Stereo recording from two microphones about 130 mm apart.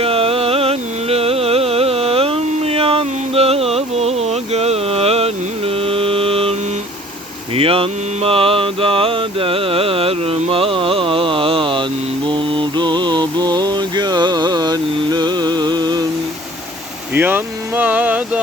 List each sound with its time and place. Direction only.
0.0 s music: 50° right (ahead or behind)
7.5 s mantra: 45° right (ahead or behind)
17.2 s speech: 15° right (ahead or behind)